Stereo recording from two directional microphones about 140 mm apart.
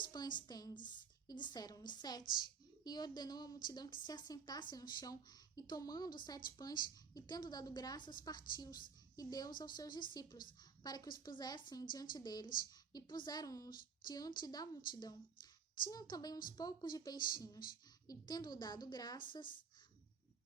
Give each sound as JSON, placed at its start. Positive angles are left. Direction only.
{"t": 0.0, "sound": "a woman's voice", "side_deg": 30}